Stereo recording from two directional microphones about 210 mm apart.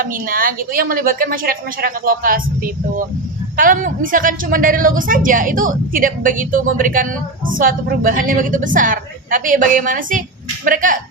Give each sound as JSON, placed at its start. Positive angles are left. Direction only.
{"t": 0.0, "sound": "a woman's voice", "side_deg": -40}
{"t": 3.6, "sound": "a woman's voice", "side_deg": -40}